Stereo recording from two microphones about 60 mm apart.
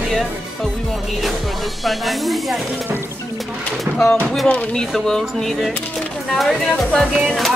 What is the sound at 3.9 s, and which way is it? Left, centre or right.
Speech, centre.